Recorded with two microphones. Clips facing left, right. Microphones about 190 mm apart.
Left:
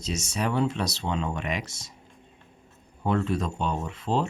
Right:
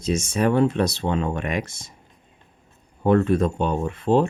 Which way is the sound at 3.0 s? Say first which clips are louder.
Right 8 dB; 55° right (ahead or behind).